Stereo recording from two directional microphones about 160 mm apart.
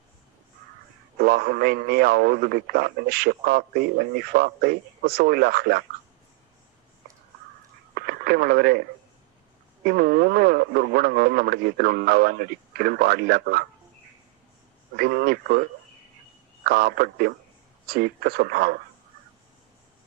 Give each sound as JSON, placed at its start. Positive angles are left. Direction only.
{"t": 1.2, "sound": "a man's voice", "side_deg": -70}
{"t": 7.9, "sound": "radio", "side_deg": -75}
{"t": 9.8, "sound": "a man's voice", "side_deg": -75}
{"t": 14.9, "sound": "a man's voice", "side_deg": -70}
{"t": 16.6, "sound": "a man's voice", "side_deg": -70}